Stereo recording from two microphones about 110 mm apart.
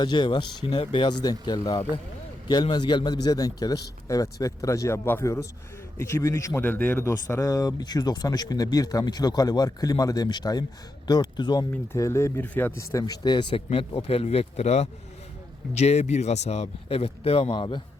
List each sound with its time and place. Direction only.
0.0 s a man's voice: 45° left (ahead or behind)
11.9 s speech: 30° left (ahead or behind); by 13.6 s 45° left (ahead or behind)
13.7 s a man's voice: 60° left (ahead or behind)
17.6 s speech: 45° left (ahead or behind)